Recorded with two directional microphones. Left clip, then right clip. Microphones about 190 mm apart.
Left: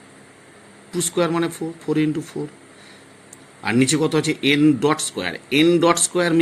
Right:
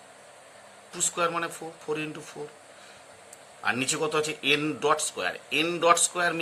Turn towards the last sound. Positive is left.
turn(degrees=15)  # may be behind; listen again after turning